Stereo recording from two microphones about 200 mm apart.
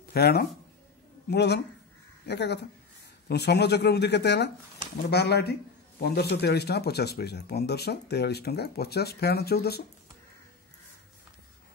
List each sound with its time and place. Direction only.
0.1 s speech: 50° left (ahead or behind)